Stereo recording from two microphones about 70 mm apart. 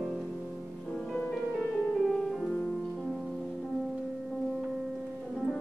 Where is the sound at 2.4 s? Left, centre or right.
Centre.